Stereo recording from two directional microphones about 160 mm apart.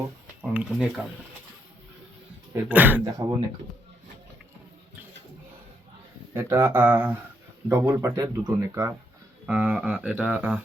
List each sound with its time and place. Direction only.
0.4 s speech: 5° right (ahead or behind)
2.5 s speech: 10° right (ahead or behind)
3.0 s speech: 25° right (ahead or behind)
6.3 s speech: 15° right (ahead or behind)
9.5 s speech: 10° right (ahead or behind)